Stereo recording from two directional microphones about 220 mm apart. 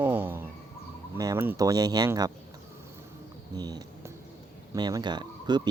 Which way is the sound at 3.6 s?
15° right (ahead or behind).